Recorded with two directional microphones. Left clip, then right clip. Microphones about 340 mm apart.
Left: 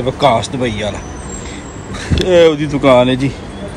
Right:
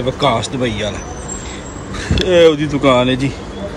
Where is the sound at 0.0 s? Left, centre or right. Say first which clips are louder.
Left 3 dB; centre.